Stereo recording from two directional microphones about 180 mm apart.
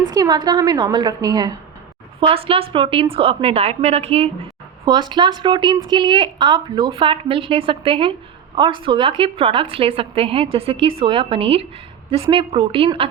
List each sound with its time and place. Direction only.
0.0 s a woman's voice: 20° right (ahead or behind)
4.9 s a woman's voice: 25° right (ahead or behind)